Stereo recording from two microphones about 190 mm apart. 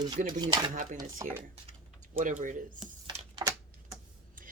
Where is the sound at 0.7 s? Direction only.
45° right (ahead or behind).